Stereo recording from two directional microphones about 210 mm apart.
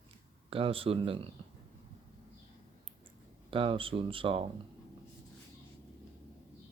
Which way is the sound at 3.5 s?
25° right (ahead or behind).